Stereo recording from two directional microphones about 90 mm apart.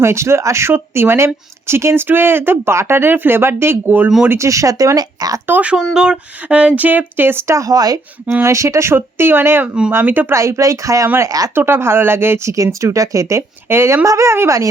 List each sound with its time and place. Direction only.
0.0 s speech: 30° right (ahead or behind)
4.3 s speech: 35° right (ahead or behind)
5.5 s speech: 15° right (ahead or behind); by 7.9 s 45° right (ahead or behind)
8.4 s speech: 30° right (ahead or behind)
10.3 s speech: 35° right (ahead or behind)
11.5 s speech: 25° right (ahead or behind)